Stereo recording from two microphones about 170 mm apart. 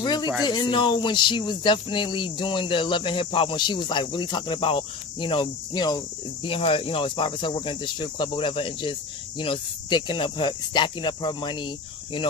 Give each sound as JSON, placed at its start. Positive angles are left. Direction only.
{"t": 0.0, "sound": "speech", "side_deg": 25}